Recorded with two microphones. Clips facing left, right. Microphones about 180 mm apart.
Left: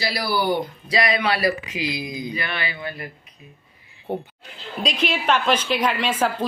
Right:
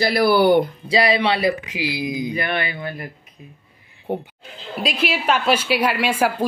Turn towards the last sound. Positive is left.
turn(degrees=-10)  # may be behind; listen again after turning